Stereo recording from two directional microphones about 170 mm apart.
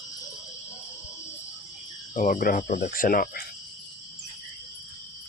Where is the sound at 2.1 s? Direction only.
50° left (ahead or behind).